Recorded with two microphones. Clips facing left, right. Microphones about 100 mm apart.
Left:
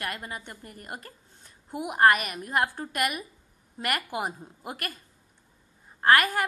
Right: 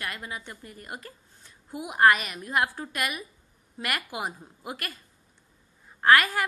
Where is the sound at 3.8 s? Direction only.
40° left (ahead or behind).